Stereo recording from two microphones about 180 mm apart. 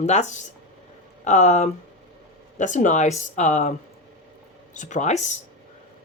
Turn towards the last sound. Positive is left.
turn(degrees=40)  # may be behind; listen again after turning